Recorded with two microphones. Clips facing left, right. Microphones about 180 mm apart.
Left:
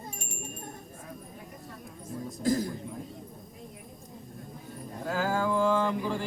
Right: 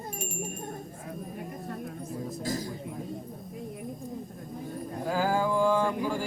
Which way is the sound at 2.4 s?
55° left (ahead or behind).